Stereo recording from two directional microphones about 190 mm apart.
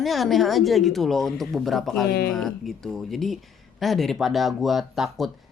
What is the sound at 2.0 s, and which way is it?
Speech, 55° left (ahead or behind).